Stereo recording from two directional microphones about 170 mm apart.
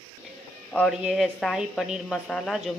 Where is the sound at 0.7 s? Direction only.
Centre (ahead or behind).